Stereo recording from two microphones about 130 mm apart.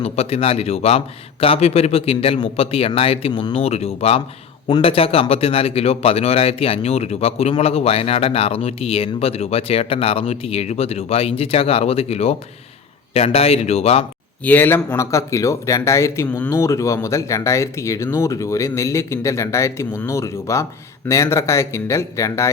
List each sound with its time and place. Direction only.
0.0 s speech: 50° left (ahead or behind)
14.4 s speech: 15° left (ahead or behind)